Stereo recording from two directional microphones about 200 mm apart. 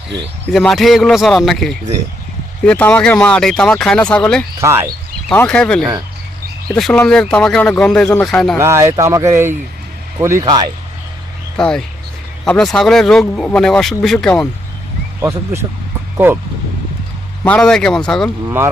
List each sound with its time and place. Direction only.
0.5 s speech: centre (ahead or behind)
4.6 s speech: 15° right (ahead or behind)
5.3 s speech: 5° left (ahead or behind)
8.5 s speech: 15° right (ahead or behind)
11.5 s speech: 5° left (ahead or behind)
15.2 s speech: 15° right (ahead or behind)
17.4 s speech: 5° left (ahead or behind)
18.4 s speech: 15° right (ahead or behind)